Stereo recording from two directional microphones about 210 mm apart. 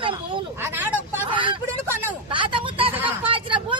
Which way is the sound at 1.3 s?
25° right (ahead or behind).